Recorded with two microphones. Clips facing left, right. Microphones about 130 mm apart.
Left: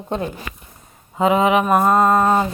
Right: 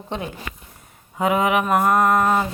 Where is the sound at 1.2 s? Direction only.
25° left (ahead or behind).